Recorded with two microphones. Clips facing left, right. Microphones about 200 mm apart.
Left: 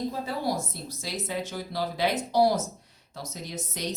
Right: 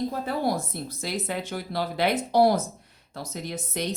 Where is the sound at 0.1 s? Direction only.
55° right (ahead or behind).